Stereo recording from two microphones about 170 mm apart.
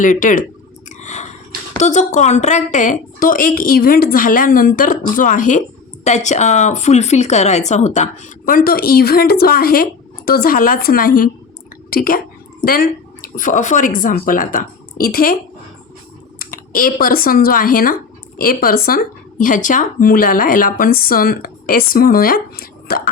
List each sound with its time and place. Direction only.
0.0 s a woman's voice: 50° left (ahead or behind)
0.9 s a sound: 45° left (ahead or behind)
1.8 s a woman's voice: 45° left (ahead or behind)
16.4 s speech: 55° left (ahead or behind)